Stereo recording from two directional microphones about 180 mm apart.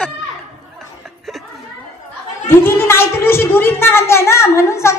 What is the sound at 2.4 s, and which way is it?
A woman's voice, 10° left (ahead or behind).